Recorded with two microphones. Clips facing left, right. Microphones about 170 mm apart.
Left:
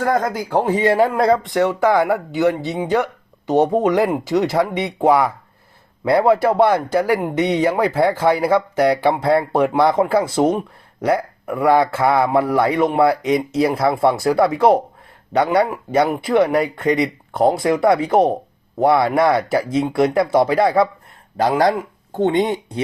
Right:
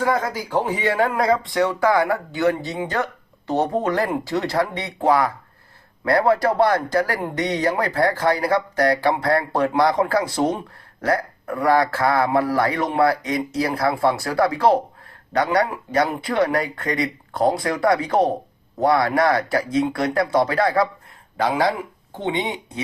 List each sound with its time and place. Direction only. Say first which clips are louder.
0.0 s speech: left 3 dB; 55° left (ahead or behind)
1.6 s speech: left 2 dB; 20° left (ahead or behind)
9.8 s speech: left 3 dB; 25° left (ahead or behind)
22.1 s speech: left 8 dB; 45° left (ahead or behind)